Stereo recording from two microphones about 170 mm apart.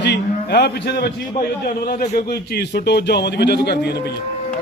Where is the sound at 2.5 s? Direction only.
80° left.